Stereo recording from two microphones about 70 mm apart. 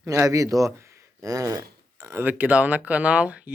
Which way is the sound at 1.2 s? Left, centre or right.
Right.